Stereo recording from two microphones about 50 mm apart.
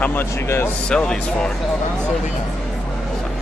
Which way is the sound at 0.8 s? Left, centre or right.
Centre.